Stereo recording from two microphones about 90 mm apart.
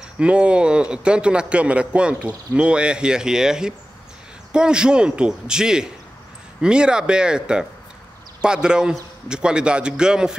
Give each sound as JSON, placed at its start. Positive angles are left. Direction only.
{"t": 0.2, "sound": "a man's voice", "side_deg": -10}
{"t": 8.6, "sound": "a man's voice", "side_deg": -10}